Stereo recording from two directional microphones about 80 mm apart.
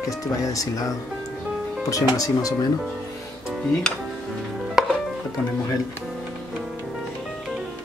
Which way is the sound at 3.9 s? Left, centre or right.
Centre.